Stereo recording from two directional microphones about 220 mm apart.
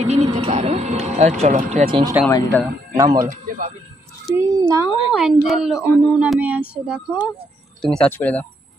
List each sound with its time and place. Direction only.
0.0 s speech: 30° right (ahead or behind)
2.2 s speech: 10° left (ahead or behind)
3.1 s speech: 40° right (ahead or behind)
4.4 s a child's voice: 15° right (ahead or behind)
5.1 s a sound: centre (ahead or behind)
7.8 s speech: 5° left (ahead or behind)